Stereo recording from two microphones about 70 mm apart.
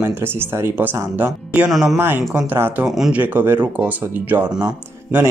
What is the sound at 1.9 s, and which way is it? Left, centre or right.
Speech, right.